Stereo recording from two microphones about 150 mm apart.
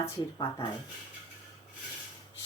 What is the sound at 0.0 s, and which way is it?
Speech, 20° left (ahead or behind).